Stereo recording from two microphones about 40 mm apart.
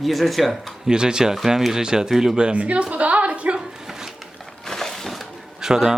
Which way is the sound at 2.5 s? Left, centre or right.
Right.